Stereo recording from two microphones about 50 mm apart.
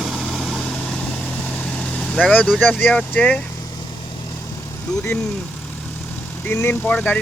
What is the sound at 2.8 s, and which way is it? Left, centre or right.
Speech, left.